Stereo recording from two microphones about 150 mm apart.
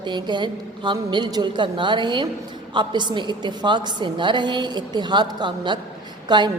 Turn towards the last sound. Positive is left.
turn(degrees=-30)  # may be behind; listen again after turning